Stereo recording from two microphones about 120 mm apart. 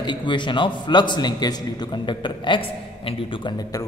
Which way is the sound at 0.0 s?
40° left (ahead or behind).